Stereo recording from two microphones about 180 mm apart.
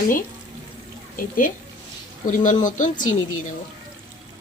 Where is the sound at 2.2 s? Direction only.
45° left (ahead or behind).